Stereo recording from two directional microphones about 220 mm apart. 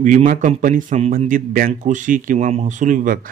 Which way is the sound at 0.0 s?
35° right (ahead or behind).